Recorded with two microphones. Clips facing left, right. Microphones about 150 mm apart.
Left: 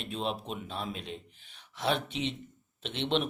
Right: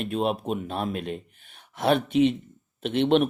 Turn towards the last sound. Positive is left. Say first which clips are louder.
# right 10 dB
turn(degrees=-55)  # may be behind; listen again after turning